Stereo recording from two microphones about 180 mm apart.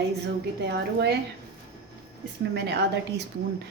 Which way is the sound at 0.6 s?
65° right (ahead or behind).